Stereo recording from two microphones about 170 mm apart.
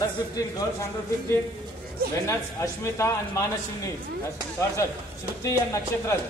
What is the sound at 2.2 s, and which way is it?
A man's voice, 15° left (ahead or behind).